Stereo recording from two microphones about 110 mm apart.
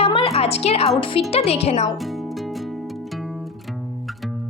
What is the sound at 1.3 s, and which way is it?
Speech, 65° left (ahead or behind).